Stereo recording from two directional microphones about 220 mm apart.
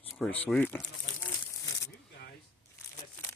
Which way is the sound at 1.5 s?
15° left (ahead or behind).